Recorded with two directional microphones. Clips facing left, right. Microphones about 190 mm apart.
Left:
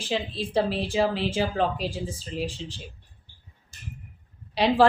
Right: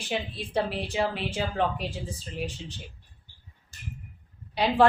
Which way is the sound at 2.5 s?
90° left.